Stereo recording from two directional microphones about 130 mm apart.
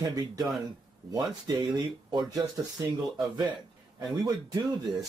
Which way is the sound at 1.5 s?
35° right (ahead or behind).